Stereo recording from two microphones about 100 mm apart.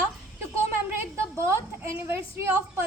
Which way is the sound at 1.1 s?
25° right (ahead or behind).